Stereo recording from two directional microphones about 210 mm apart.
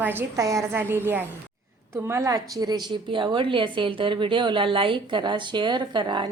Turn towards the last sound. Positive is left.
turn(degrees=-20)  # may be behind; listen again after turning